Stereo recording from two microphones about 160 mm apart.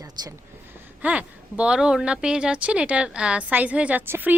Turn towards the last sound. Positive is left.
turn(degrees=-10)  # may be behind; listen again after turning